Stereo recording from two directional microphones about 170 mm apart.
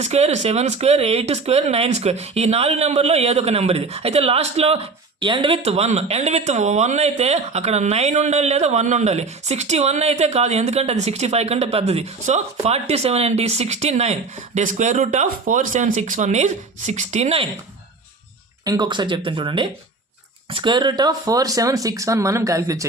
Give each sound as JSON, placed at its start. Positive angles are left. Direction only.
{"t": 0.0, "sound": "speech", "side_deg": -40}
{"t": 18.6, "sound": "speech", "side_deg": -25}